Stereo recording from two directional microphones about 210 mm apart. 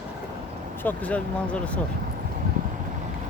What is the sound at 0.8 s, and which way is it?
Speech, 5° left (ahead or behind).